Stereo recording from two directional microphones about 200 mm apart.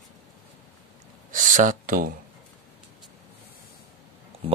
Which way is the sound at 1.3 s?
40° right (ahead or behind).